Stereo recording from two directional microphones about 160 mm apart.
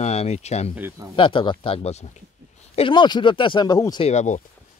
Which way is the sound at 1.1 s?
35° left (ahead or behind).